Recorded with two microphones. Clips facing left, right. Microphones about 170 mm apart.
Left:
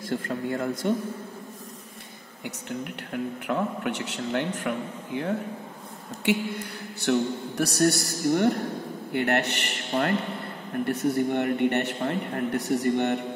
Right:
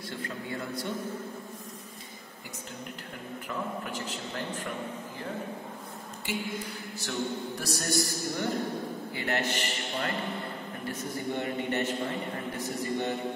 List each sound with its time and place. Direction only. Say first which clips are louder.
0.1 s speech: left 9 dB; 50° left (ahead or behind)
3.1 s a man's voice: left 11 dB; 65° left (ahead or behind)